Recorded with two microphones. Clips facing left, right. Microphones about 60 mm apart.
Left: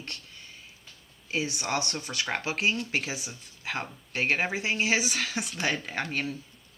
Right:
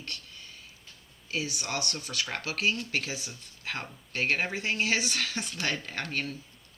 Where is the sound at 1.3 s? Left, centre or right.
Left.